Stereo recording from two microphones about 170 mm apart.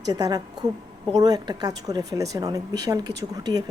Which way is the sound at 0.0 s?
25° right (ahead or behind).